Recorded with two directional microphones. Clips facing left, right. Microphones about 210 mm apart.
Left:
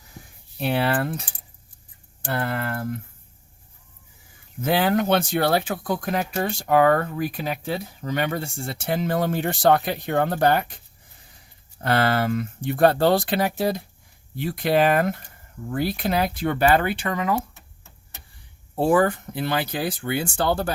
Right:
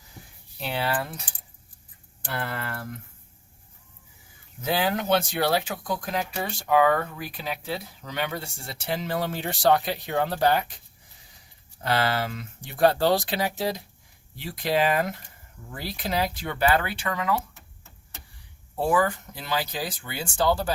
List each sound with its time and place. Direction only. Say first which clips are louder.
0.6 s speech: left 6 dB; 55° left (ahead or behind)
2.2 s speech: left 6 dB; 50° left (ahead or behind)
4.6 s speech: left 5 dB; 60° left (ahead or behind)
11.8 s speech: left 4 dB; 55° left (ahead or behind)
18.8 s speech: left 5 dB; 60° left (ahead or behind)